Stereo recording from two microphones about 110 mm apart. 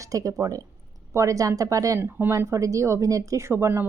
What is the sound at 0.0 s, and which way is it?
Speech, 30° right (ahead or behind).